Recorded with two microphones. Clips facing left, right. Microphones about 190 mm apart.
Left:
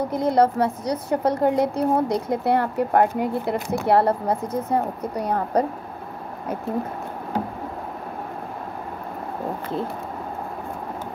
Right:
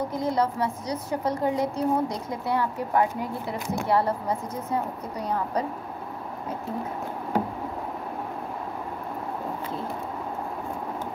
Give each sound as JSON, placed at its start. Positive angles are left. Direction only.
{"t": 0.1, "sound": "a woman's voice", "side_deg": 65}